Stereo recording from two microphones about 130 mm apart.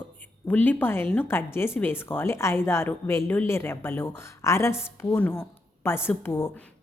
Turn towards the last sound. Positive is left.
turn(degrees=20)  # may be behind; listen again after turning